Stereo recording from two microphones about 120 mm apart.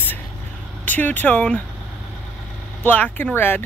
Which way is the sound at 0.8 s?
15° left (ahead or behind).